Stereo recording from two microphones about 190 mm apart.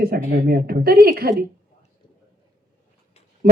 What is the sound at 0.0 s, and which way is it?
Speech, 50° right (ahead or behind).